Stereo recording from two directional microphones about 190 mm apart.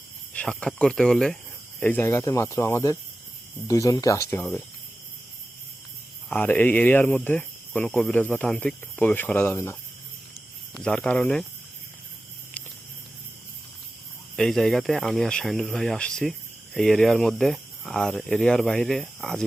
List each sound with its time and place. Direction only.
0.3 s speech: 5° left (ahead or behind)
6.3 s speech: 10° left (ahead or behind)
10.8 s speech: 5° left (ahead or behind)
14.3 s speech: centre (ahead or behind)